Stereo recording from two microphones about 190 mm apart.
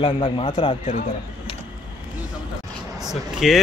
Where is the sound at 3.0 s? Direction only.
Centre (ahead or behind).